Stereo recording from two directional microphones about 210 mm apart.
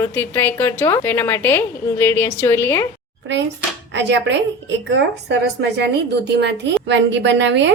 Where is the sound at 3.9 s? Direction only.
55° right (ahead or behind).